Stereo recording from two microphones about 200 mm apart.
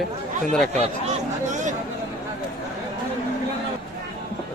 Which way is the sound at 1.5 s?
35° right (ahead or behind).